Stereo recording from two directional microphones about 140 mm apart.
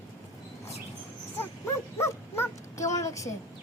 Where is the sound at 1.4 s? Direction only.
20° left (ahead or behind).